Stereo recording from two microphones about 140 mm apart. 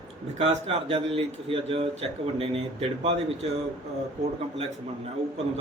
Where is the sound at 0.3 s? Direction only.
45° right (ahead or behind).